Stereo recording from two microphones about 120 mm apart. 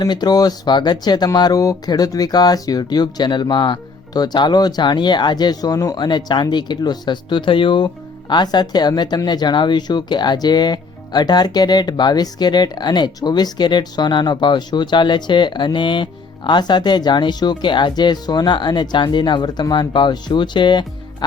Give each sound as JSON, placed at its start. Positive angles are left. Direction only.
{"t": 0.0, "sound": "speech", "side_deg": 35}